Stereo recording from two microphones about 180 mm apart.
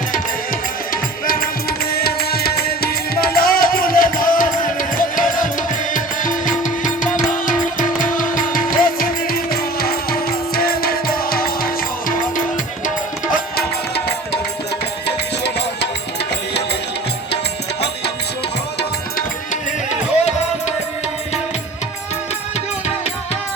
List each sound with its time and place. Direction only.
1.9 s music: 60° left (ahead or behind)
15.0 s music: 70° left (ahead or behind)